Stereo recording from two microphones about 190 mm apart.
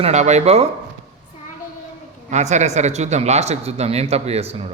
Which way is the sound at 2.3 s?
35° right (ahead or behind).